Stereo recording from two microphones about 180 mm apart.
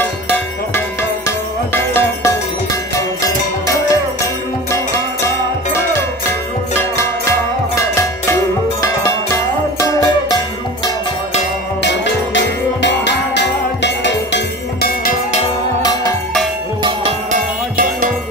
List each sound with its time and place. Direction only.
0.0 s music: 10° left (ahead or behind)
5.7 s music: 15° left (ahead or behind)
11.8 s music: 75° left (ahead or behind); by 15.1 s 60° left (ahead or behind)
17.3 s music: 50° right (ahead or behind)